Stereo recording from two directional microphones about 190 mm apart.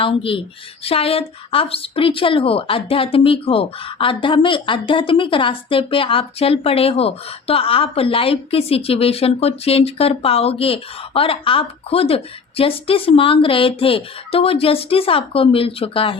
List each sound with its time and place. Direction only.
0.0 s a woman's voice: 30° left (ahead or behind)